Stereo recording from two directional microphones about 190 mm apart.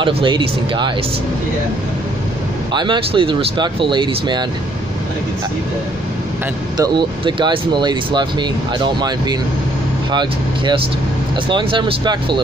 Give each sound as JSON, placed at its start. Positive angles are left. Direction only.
{"t": 0.0, "sound": "speech", "side_deg": -25}
{"t": 2.7, "sound": "speech", "side_deg": -25}
{"t": 6.8, "sound": "speech", "side_deg": -25}